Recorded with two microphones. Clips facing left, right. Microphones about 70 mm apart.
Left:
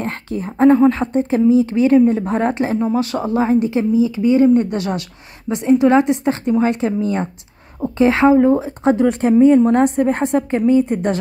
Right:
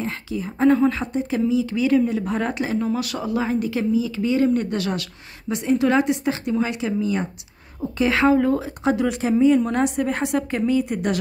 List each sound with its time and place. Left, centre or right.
0.0 s a woman's voice: left
8.0 s a woman's voice: left